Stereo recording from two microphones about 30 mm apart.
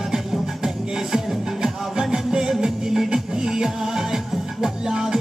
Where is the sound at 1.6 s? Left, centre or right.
Right.